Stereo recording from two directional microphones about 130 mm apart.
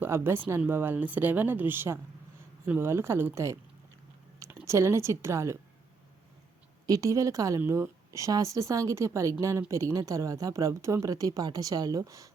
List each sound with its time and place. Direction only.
0.0 s a woman's voice: 15° right (ahead or behind)
6.8 s a woman's voice: 25° right (ahead or behind)